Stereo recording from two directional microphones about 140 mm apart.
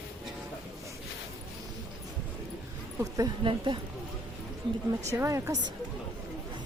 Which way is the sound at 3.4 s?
35° right (ahead or behind).